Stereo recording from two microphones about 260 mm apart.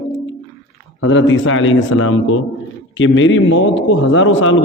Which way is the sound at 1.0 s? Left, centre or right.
Left.